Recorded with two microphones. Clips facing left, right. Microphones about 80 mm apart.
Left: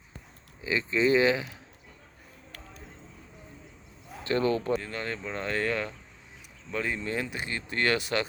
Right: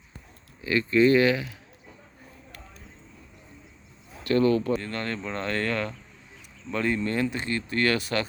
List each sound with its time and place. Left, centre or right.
0.6 s speech: centre
4.2 s speech: left
4.7 s speech: centre